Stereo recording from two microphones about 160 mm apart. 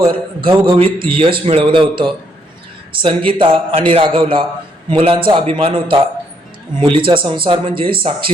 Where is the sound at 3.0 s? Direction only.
30° right (ahead or behind).